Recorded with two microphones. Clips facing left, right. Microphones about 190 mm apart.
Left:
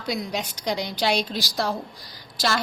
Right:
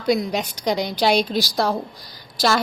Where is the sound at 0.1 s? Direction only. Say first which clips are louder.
Right 8 dB; 50° right (ahead or behind).